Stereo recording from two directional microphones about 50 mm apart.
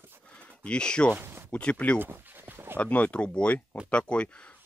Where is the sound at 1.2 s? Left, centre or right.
Right.